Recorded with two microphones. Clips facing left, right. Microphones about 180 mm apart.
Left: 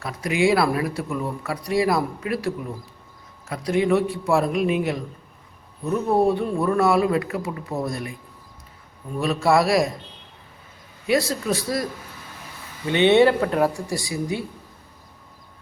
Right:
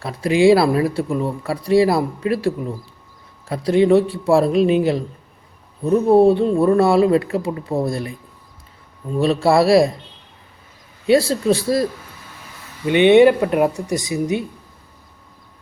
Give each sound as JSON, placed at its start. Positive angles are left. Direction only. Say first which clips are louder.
{"t": 0.0, "sound": "speech", "louder": "right 7 dB", "side_deg": -30}
{"t": 3.5, "sound": "a man's voice", "louder": "right 6 dB", "side_deg": -30}
{"t": 9.1, "sound": "a man's voice", "louder": "right 4 dB", "side_deg": -30}
{"t": 11.0, "sound": "speech", "louder": "right 7 dB", "side_deg": -30}
{"t": 12.9, "sound": "speech", "louder": "right 5 dB", "side_deg": -15}